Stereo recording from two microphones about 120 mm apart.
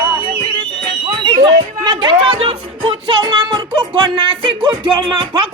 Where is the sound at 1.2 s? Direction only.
40° right (ahead or behind).